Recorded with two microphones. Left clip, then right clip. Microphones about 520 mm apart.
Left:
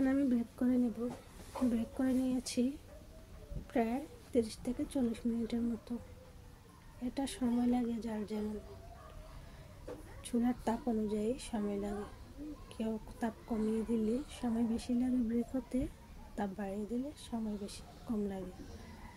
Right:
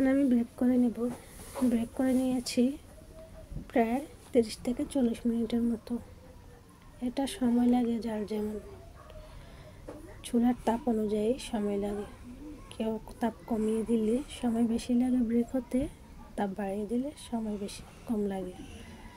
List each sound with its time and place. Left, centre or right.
0.0 s a sound: left
1.7 s speech: left
3.7 s speech: left
7.2 s speech: left
10.2 s speech: left